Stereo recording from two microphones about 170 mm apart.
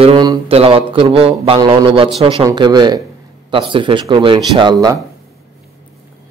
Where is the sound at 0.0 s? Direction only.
30° right (ahead or behind).